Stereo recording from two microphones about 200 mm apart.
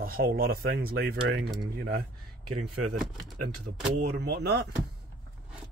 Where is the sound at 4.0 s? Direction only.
55° right (ahead or behind).